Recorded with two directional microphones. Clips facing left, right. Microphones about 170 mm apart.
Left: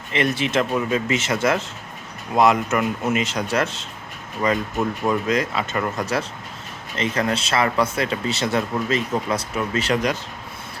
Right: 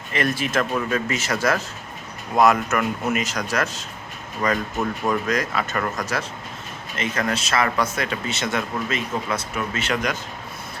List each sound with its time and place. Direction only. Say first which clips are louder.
0.1 s speech: left 2 dB; 20° left (ahead or behind)